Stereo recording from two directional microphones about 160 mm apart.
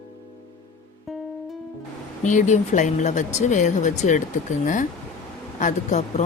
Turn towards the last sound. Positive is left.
turn(degrees=45)  # may be behind; listen again after turning